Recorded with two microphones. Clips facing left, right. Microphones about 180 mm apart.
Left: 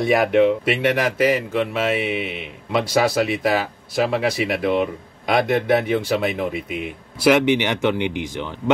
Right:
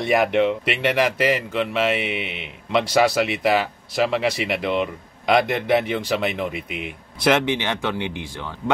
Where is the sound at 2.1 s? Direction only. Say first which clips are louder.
Left 4 dB; 50° left (ahead or behind).